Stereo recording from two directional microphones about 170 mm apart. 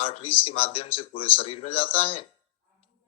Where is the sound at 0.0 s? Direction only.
35° left (ahead or behind).